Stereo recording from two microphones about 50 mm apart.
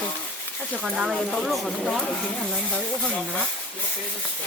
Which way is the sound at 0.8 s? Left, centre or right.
Centre.